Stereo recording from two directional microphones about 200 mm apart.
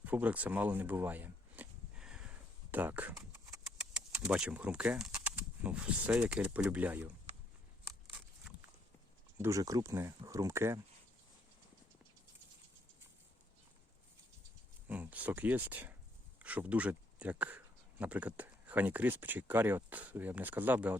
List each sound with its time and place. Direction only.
0.0 s a sound: 10° right (ahead or behind)
2.7 s speech: 10° right (ahead or behind)
9.4 s speech: 15° right (ahead or behind)
14.8 s speech: 10° right (ahead or behind)